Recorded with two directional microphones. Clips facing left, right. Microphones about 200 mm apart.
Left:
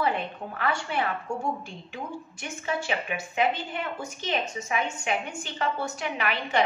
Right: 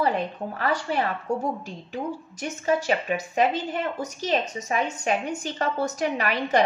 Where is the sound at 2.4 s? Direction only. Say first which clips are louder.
Right 7 dB; 40° right (ahead or behind).